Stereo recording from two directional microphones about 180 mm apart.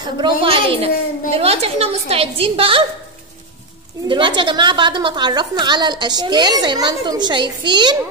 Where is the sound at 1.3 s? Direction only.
35° right (ahead or behind).